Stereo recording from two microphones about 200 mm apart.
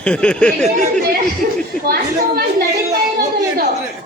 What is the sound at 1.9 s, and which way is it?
Speech, 50° right (ahead or behind).